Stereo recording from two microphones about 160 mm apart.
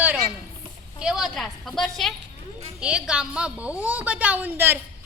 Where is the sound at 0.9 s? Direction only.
5° right (ahead or behind).